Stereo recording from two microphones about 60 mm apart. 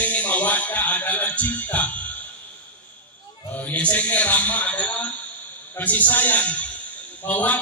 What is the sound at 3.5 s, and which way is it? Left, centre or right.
A man's voice, left.